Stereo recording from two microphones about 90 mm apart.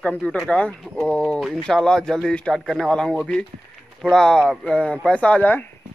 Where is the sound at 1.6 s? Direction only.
5° left (ahead or behind).